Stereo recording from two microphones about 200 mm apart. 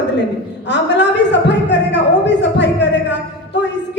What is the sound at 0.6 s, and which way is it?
A woman's voice, 60° left (ahead or behind).